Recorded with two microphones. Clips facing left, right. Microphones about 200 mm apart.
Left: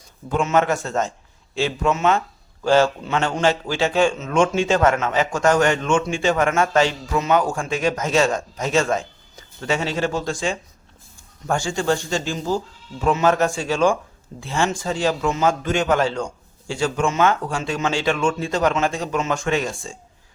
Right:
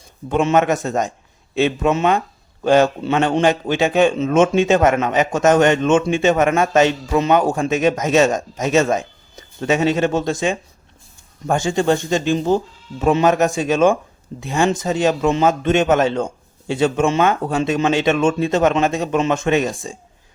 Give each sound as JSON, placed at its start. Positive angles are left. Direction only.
{"t": 0.3, "sound": "a man's voice", "side_deg": -20}